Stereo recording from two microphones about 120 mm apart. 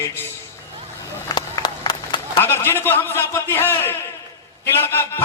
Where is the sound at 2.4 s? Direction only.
20° left (ahead or behind).